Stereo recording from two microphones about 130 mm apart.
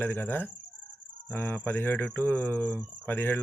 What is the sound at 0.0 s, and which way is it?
Speech, 15° left (ahead or behind).